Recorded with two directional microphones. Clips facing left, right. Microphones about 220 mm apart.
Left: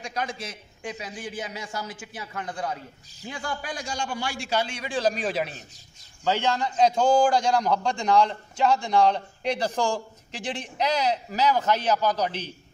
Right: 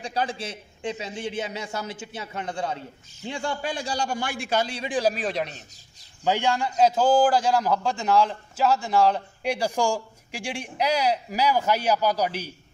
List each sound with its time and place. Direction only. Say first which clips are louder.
0.0 s a man's voice: right 3 dB; 30° right (ahead or behind); by 4.7 s 50° right (ahead or behind)
4.8 s a man's voice: right 1 dB; 15° right (ahead or behind)
5.1 s a man's voice: even; centre (ahead or behind)
6.2 s a man's voice: right 1 dB; 15° right (ahead or behind)